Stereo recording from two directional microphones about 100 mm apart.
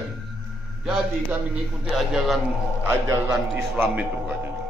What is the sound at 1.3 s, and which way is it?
Speech, 15° right (ahead or behind).